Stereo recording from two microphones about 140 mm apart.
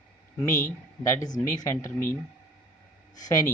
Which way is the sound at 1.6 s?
20° left (ahead or behind).